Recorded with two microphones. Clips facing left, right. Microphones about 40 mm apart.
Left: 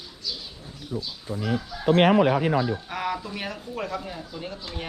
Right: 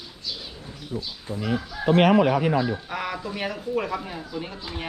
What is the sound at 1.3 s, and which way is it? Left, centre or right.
Speech, right.